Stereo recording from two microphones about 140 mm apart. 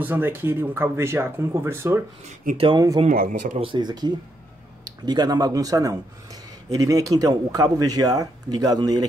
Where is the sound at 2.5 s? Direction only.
70° right (ahead or behind).